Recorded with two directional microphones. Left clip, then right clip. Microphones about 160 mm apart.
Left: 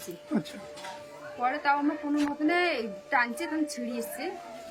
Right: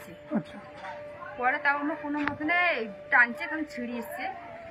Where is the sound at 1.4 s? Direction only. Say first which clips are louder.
Even; 20° left (ahead or behind).